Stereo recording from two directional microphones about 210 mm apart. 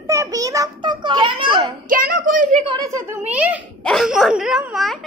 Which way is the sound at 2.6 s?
20° right (ahead or behind).